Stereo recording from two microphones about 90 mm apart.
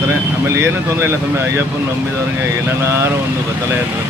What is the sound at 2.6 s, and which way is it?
Speech, 30° right (ahead or behind).